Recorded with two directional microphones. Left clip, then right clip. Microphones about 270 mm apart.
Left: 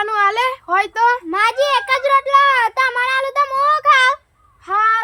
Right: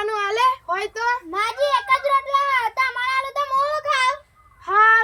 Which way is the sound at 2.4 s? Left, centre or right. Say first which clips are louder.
Left 7 dB; centre.